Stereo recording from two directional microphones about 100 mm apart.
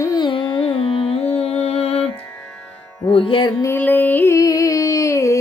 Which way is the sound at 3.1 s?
60° left (ahead or behind).